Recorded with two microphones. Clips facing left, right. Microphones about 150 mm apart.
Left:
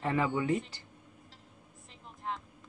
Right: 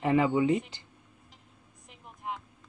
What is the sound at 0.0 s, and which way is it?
Speech, 20° right (ahead or behind).